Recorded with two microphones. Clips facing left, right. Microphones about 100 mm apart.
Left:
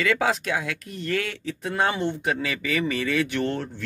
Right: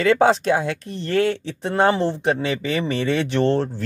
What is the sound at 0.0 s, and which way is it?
Speech, 35° right (ahead or behind).